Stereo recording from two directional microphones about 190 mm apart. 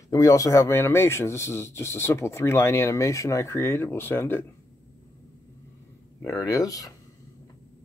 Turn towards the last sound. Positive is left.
turn(degrees=20)  # may be behind; listen again after turning